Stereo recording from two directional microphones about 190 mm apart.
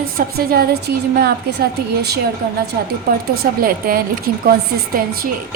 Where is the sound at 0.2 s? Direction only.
50° right (ahead or behind).